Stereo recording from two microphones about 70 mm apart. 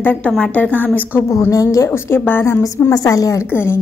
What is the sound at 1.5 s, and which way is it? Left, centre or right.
Speech, left.